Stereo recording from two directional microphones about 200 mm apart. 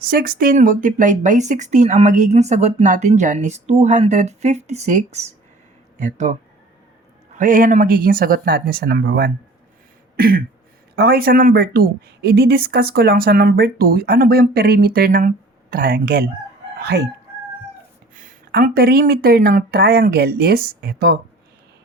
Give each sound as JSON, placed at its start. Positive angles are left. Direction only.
{"t": 0.0, "sound": "speech", "side_deg": -45}
{"t": 7.3, "sound": "speech", "side_deg": -45}
{"t": 16.7, "sound": "chicken", "side_deg": -55}
{"t": 18.1, "sound": "speech", "side_deg": -40}